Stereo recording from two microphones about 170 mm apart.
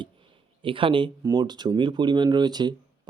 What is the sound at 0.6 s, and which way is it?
Speech, 30° right (ahead or behind).